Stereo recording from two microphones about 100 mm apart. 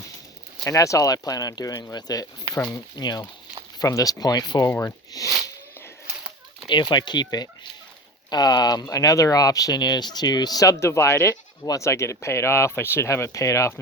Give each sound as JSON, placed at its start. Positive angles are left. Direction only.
{"t": 0.6, "sound": "speech", "side_deg": 30}
{"t": 4.7, "sound": "speech", "side_deg": 25}
{"t": 6.7, "sound": "speech", "side_deg": 50}